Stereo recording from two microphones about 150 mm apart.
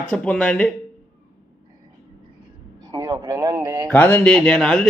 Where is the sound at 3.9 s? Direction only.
10° left (ahead or behind).